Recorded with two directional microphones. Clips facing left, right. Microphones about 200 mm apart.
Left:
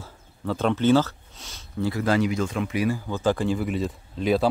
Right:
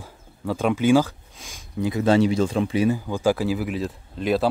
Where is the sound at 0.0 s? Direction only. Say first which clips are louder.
Right 1 dB; 10° right (ahead or behind); by 3.0 s 25° right (ahead or behind).